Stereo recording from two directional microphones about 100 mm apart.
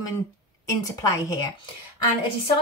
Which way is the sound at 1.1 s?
35° left (ahead or behind).